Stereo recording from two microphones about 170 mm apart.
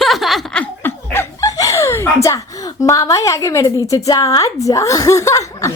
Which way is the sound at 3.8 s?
20° left (ahead or behind).